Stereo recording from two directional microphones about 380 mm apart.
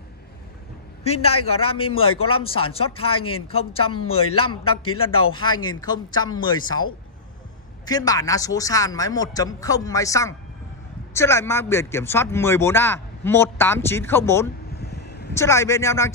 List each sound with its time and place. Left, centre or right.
1.0 s a man's voice: centre
1.3 s speech: left
1.7 s speech: centre
3.8 s speech: left
4.9 s speech: centre
5.2 s speech: left
5.6 s speech: centre
7.8 s speech: centre
14.7 s vehicle: left
15.3 s speech: centre